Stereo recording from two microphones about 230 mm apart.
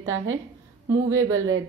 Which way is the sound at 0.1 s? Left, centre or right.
Right.